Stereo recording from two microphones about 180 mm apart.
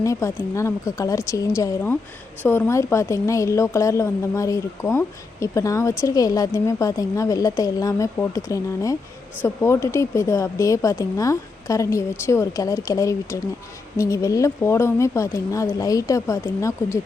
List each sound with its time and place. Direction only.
0.0 s a woman's voice: 15° left (ahead or behind)